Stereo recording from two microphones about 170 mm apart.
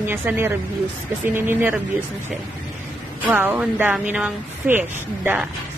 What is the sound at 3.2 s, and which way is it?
A woman's voice, 10° right (ahead or behind).